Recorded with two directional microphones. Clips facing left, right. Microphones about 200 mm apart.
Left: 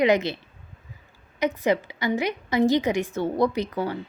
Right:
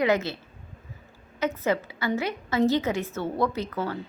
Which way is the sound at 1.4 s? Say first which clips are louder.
Left 3 dB; 15° left (ahead or behind).